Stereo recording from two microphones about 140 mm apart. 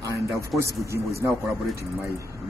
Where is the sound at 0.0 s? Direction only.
20° right (ahead or behind).